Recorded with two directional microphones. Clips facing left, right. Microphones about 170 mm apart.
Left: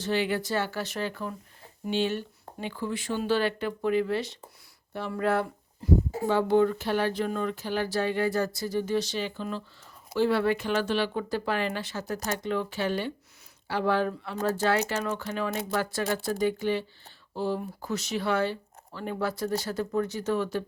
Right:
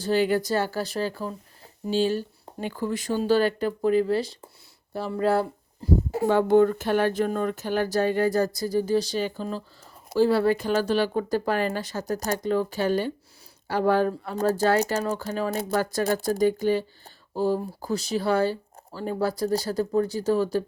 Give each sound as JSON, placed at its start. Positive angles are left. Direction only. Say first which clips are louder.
{"t": 0.0, "sound": "speech", "louder": "right 5 dB", "side_deg": -40}
{"t": 6.1, "sound": "speech", "louder": "right 4 dB", "side_deg": -60}